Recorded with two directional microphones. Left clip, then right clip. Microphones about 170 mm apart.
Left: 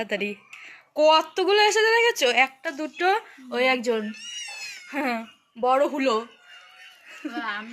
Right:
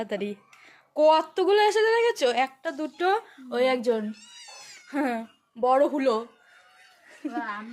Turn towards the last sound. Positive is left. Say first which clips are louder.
# left 2 dB
turn(degrees=-50)  # may be behind; listen again after turning